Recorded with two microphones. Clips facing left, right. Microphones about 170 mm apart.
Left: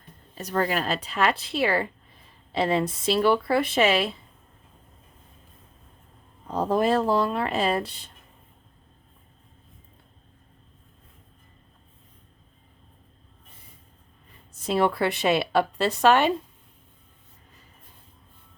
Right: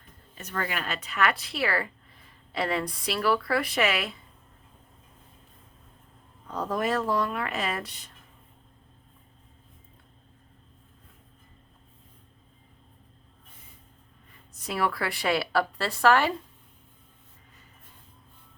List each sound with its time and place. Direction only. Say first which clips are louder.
0.3 s a woman's voice: left 7 dB; 35° left (ahead or behind)
6.5 s a woman's voice: left 6 dB; 30° left (ahead or behind)
14.5 s a woman's voice: left 6 dB; 25° left (ahead or behind)